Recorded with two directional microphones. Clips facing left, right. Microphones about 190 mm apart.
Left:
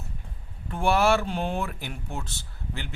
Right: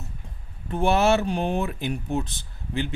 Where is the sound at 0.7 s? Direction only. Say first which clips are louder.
Right 2 dB; 20° right (ahead or behind).